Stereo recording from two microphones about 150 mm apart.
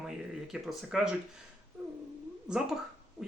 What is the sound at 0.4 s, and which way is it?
Speech, centre (ahead or behind).